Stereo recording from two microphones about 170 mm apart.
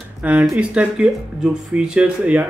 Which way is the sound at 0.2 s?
10° right (ahead or behind).